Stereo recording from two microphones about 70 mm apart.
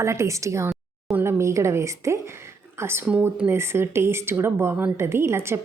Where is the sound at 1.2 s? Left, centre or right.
Right.